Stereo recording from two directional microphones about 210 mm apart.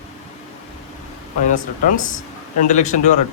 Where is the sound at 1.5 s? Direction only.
35° left (ahead or behind).